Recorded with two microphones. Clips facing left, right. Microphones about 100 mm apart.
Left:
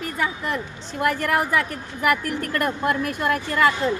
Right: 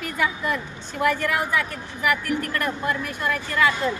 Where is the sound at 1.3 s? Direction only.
50° left (ahead or behind).